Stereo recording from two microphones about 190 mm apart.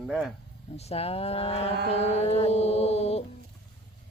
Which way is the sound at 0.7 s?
30° left (ahead or behind).